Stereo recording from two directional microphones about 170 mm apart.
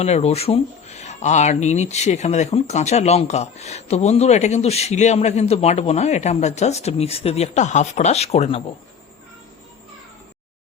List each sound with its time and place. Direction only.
0.0 s speech: 40° left (ahead or behind)